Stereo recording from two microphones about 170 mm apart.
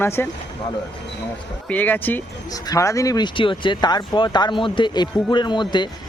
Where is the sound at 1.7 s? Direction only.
10° left (ahead or behind).